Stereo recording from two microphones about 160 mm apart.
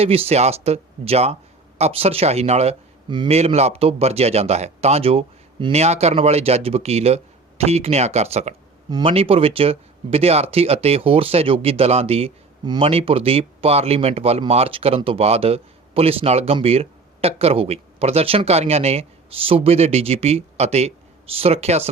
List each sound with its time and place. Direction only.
0.0 s speech: 40° right (ahead or behind)
3.1 s a man's voice: 30° right (ahead or behind)
3.3 s speech: 40° right (ahead or behind)
8.9 s speech: 30° right (ahead or behind)